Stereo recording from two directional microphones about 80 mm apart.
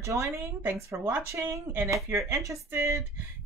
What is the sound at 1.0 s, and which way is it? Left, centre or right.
Speech, right.